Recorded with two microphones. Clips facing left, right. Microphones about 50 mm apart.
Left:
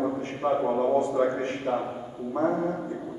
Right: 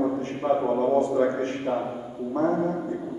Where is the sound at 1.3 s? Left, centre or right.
Left.